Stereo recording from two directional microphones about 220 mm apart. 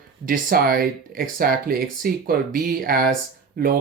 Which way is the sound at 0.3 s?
40° right (ahead or behind).